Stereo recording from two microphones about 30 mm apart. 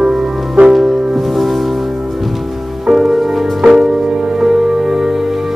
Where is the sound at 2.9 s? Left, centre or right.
Centre.